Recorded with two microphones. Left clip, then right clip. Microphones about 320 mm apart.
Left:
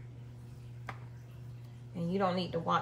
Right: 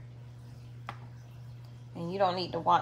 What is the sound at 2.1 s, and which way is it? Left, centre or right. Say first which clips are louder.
Speech: right 4 dB; right.